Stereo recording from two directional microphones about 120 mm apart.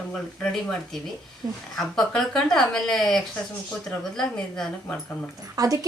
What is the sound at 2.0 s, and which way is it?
Speech, 5° left (ahead or behind).